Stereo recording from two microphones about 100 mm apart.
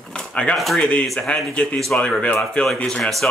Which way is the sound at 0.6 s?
Centre (ahead or behind).